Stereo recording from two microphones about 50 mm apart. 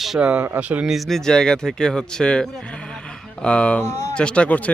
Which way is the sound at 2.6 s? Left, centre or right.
Left.